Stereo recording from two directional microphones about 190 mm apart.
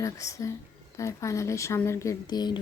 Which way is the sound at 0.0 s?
15° left (ahead or behind).